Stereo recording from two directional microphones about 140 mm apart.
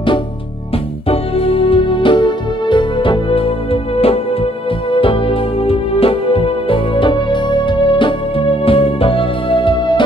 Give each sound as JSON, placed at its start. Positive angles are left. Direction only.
{"t": 1.0, "sound": "music", "side_deg": 45}